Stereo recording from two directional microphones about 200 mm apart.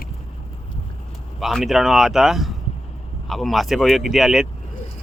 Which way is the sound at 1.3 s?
Centre (ahead or behind).